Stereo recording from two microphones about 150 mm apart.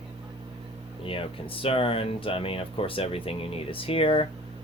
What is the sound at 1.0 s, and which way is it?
Speech, 35° left (ahead or behind).